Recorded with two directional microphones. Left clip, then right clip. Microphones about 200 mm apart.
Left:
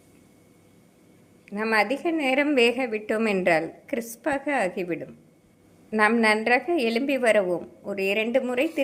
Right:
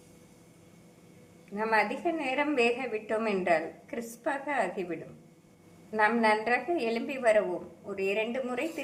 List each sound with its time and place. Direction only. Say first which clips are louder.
1.5 s a woman's voice: left 4 dB; 50° left (ahead or behind)